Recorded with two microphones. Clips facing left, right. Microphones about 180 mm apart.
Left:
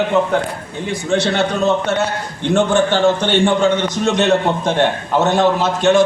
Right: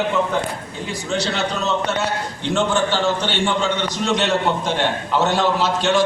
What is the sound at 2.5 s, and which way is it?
A man's voice, 50° left (ahead or behind).